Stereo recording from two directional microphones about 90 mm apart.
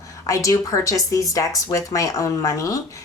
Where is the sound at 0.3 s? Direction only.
40° left (ahead or behind).